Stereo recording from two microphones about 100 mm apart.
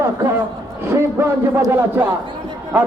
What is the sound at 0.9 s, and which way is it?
A man's voice, 25° right (ahead or behind).